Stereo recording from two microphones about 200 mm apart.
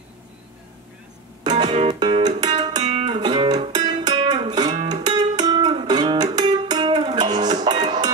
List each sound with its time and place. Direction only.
1.6 s music: 25° right (ahead or behind)
2.8 s music: 35° right (ahead or behind)
3.1 s music: 25° right (ahead or behind)